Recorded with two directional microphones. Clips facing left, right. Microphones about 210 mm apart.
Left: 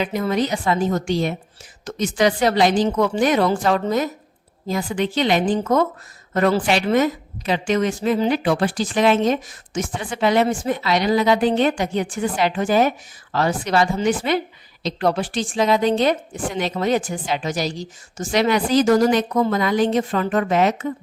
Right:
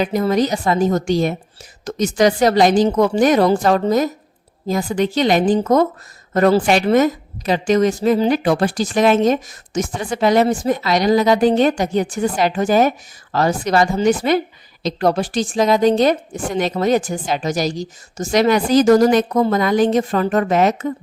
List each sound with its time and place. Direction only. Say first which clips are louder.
0.0 s a woman's voice: right 4 dB; 40° right (ahead or behind)